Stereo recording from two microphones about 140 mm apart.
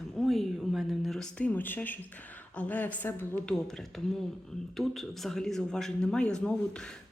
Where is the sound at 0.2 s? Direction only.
Centre (ahead or behind).